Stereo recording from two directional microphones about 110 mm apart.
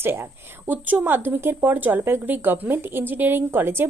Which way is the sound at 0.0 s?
20° right (ahead or behind).